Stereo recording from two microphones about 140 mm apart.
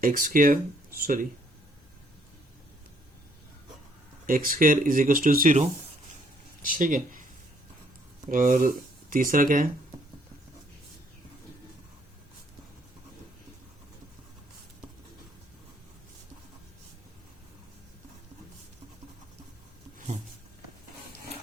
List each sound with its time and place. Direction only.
0.0 s speech: 80° right
4.3 s speech: 80° right
6.7 s speech: 70° right (ahead or behind)
8.3 s speech: 75° right (ahead or behind)